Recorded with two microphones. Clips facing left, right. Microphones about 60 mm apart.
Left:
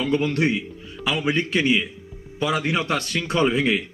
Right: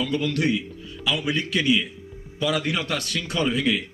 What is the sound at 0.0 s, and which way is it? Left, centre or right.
A man's voice, left.